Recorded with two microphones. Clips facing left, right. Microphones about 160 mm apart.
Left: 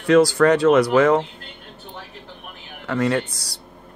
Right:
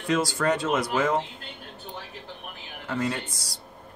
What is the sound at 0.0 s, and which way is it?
Speech, 70° left (ahead or behind).